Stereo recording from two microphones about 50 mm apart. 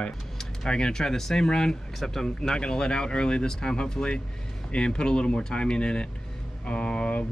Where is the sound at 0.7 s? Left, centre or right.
Centre.